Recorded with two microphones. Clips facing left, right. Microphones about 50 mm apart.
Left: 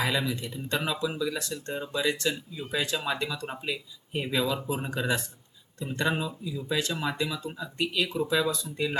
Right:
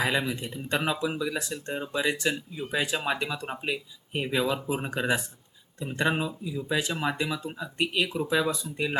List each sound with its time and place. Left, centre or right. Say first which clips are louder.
0.0 s speech: right 1 dB; right